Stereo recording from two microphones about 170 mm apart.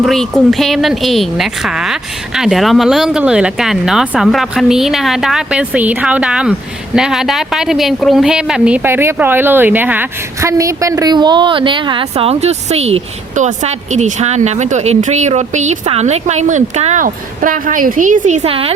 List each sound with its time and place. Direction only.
0.0 s speech: centre (ahead or behind); by 18.7 s 35° right (ahead or behind)